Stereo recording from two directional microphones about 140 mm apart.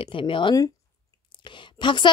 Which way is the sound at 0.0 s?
40° left (ahead or behind).